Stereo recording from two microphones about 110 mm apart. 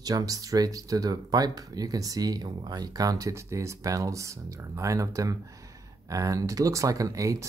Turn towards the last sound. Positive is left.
turn(degrees=-30)  # may be behind; listen again after turning